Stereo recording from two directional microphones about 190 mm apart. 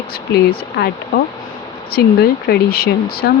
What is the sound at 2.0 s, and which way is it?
Speech, 55° left (ahead or behind).